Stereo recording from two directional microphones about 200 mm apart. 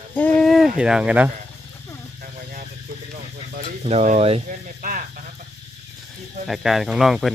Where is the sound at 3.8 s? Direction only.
35° right (ahead or behind).